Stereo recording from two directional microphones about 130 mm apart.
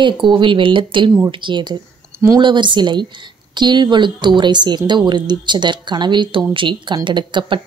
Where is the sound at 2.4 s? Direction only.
35° right (ahead or behind).